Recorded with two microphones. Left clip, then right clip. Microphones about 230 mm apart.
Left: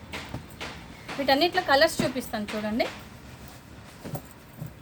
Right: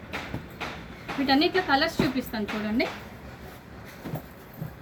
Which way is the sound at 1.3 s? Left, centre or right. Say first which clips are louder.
Left 1 dB; left.